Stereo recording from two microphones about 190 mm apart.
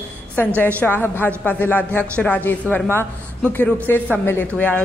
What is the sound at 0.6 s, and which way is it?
A man's voice, 10° left (ahead or behind).